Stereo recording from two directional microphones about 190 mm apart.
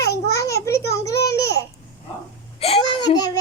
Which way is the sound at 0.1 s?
15° left (ahead or behind).